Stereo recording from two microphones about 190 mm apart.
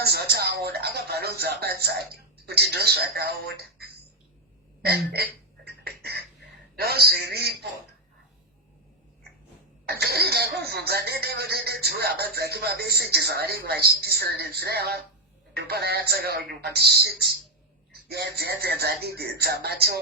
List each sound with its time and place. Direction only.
0.0 s speech: 55° right (ahead or behind)
5.6 s a sound: 55° right (ahead or behind)
9.8 s speech: 55° right (ahead or behind)